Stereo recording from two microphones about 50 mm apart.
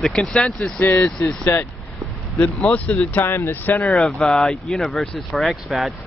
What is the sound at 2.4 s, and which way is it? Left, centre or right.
Speech, centre.